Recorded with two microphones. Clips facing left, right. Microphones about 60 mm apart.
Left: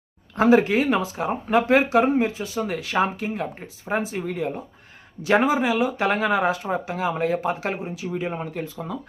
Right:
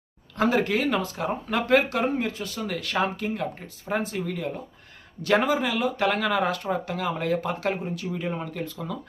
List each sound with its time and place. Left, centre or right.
0.3 s speech: centre
7.6 s speech: centre